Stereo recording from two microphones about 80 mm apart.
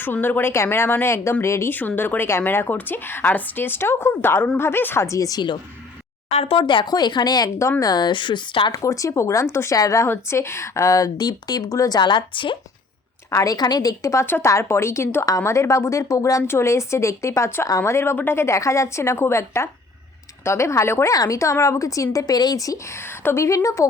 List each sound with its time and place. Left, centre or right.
0.0 s a woman's voice: left
5.0 s speech: left
6.6 s speech: left
8.7 s speech: left
11.9 s a woman's voice: left
13.3 s speech: left